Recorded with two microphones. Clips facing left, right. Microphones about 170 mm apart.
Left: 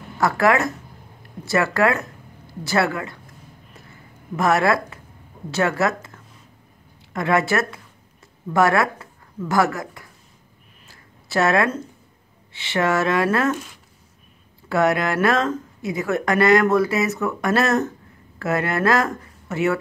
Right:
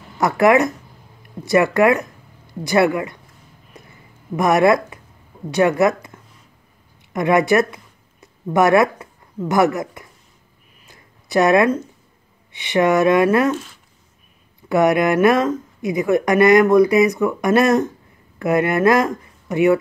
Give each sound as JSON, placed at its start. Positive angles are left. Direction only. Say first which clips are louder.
{"t": 0.2, "sound": "a woman's voice", "louder": "right 4 dB", "side_deg": -20}
{"t": 4.4, "sound": "speech", "louder": "right 4 dB", "side_deg": -15}
{"t": 7.1, "sound": "a sound", "louder": "right 5 dB", "side_deg": -15}
{"t": 9.5, "sound": "a woman's voice", "louder": "right 4 dB", "side_deg": -20}
{"t": 10.9, "sound": "a sound", "louder": "right 5 dB", "side_deg": -15}
{"t": 12.5, "sound": "speech", "louder": "right 5 dB", "side_deg": -15}
{"t": 14.7, "sound": "speech", "louder": "right 4 dB", "side_deg": -15}